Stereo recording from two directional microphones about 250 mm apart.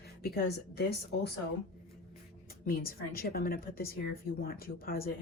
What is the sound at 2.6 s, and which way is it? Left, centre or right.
Speech, left.